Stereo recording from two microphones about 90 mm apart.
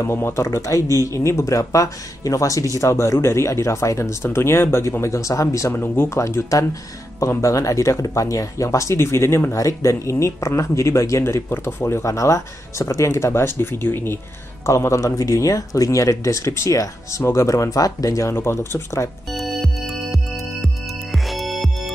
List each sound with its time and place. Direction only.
0.0 s speech: 30° left (ahead or behind)
14.7 s speech: 35° left (ahead or behind)
19.3 s music: centre (ahead or behind)